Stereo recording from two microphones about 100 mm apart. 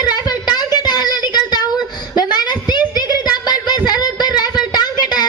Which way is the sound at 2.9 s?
40° left (ahead or behind).